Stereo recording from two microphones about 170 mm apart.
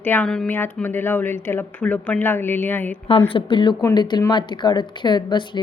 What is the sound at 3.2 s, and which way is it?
Speech, 30° left (ahead or behind).